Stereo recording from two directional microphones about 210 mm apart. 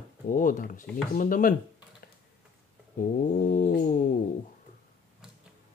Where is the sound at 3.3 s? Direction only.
40° left (ahead or behind).